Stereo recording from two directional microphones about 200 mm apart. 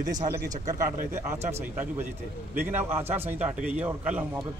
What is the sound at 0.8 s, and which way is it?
Speech, 40° right (ahead or behind).